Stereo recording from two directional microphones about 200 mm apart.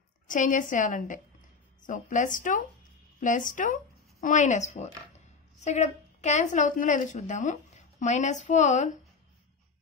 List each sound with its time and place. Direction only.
0.3 s a woman's voice: 40° left (ahead or behind)